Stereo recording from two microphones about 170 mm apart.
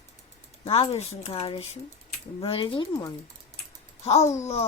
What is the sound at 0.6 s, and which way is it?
A child's voice, 35° left (ahead or behind).